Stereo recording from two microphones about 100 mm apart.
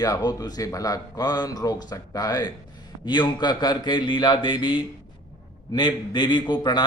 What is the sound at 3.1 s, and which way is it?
A man's voice, 50° left (ahead or behind).